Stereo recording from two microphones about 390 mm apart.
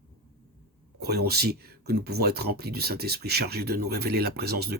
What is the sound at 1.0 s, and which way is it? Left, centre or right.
Speech, right.